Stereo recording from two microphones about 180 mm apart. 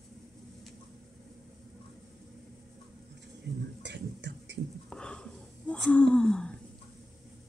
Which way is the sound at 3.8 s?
75° right (ahead or behind).